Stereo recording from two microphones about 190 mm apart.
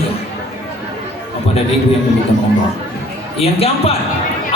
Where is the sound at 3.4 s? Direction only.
30° left (ahead or behind).